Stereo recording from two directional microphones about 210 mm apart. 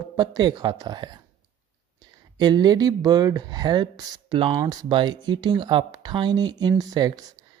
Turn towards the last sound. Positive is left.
turn(degrees=-20)  # may be behind; listen again after turning